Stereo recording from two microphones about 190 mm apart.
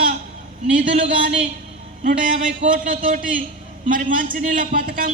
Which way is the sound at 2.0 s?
45° right (ahead or behind).